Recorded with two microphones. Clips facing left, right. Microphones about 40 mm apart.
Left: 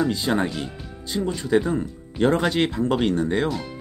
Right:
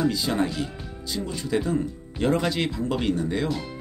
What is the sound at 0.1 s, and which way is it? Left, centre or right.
Speech, left.